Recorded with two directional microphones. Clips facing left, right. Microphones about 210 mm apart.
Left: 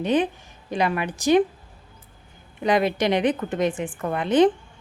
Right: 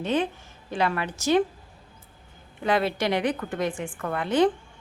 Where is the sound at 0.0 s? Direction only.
15° left (ahead or behind).